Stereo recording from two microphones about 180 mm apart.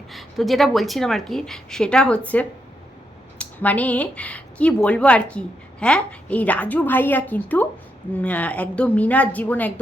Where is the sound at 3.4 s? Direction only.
10° left (ahead or behind).